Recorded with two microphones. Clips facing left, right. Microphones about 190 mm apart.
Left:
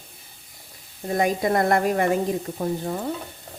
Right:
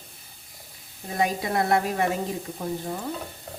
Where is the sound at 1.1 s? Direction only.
50° left (ahead or behind).